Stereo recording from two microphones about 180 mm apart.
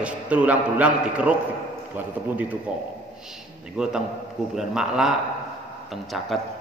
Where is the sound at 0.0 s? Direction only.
5° right (ahead or behind).